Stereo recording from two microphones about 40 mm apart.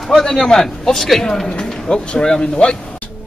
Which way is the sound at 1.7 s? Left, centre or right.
Left.